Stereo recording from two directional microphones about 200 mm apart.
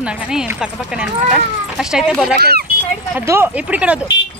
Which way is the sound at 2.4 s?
50° right (ahead or behind).